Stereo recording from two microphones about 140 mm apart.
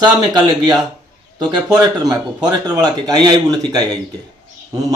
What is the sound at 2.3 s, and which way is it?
A man's voice, 30° right (ahead or behind).